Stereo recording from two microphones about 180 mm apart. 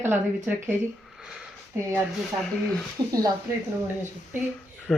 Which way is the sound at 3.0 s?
25° right (ahead or behind).